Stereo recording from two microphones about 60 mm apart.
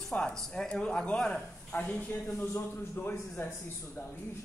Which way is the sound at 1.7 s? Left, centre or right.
Left.